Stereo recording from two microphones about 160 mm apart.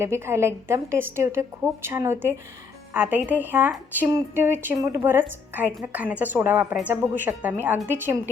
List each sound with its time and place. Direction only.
0.0 s a woman's voice: 15° right (ahead or behind)